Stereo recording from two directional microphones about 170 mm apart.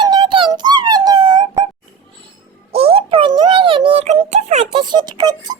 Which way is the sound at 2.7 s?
35° right (ahead or behind).